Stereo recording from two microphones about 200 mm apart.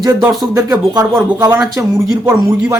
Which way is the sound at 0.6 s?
15° right (ahead or behind).